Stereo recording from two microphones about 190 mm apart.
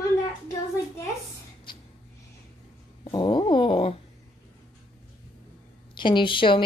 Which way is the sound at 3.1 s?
25° left (ahead or behind).